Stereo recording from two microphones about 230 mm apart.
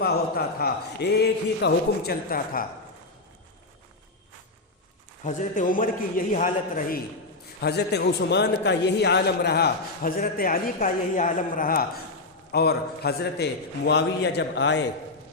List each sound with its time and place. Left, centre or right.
0.0 s a man's voice: left
5.2 s a man's voice: left